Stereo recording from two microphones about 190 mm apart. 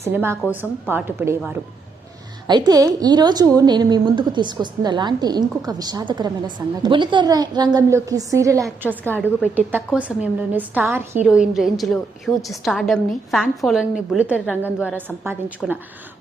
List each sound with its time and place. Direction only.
0.0 s a woman's voice: 10° right (ahead or behind)
2.5 s a woman's voice: 20° right (ahead or behind)